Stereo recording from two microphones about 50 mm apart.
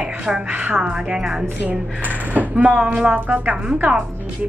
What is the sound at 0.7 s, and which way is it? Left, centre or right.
Speech, centre.